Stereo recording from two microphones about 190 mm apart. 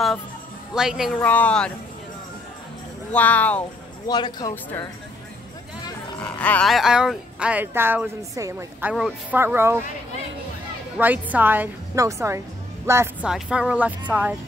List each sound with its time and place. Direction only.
0.7 s speech: centre (ahead or behind)
3.1 s speech: 10° left (ahead or behind)
4.1 s speech: 20° left (ahead or behind)
6.2 s speech: 5° left (ahead or behind); by 8.9 s 15° right (ahead or behind)
8.9 s speech: centre (ahead or behind)
9.4 s speech: 10° right (ahead or behind)
11.0 s speech: 10° right (ahead or behind)